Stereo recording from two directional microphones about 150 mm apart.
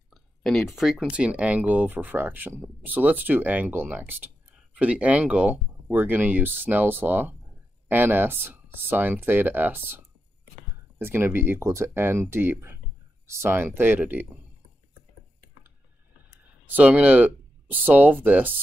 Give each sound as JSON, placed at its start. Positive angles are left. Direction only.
{"t": 0.1, "sound": "a sound", "side_deg": 0}
{"t": 0.7, "sound": "speech", "side_deg": 0}
{"t": 11.0, "sound": "speech", "side_deg": -15}
{"t": 16.6, "sound": "speech", "side_deg": -10}